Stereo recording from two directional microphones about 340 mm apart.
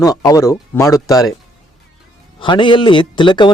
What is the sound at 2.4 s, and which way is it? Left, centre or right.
A man's voice, centre.